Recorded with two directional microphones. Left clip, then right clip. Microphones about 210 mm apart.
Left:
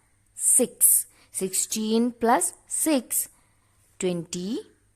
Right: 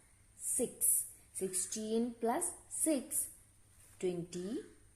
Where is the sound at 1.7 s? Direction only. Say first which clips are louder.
Left 13 dB; 50° left (ahead or behind).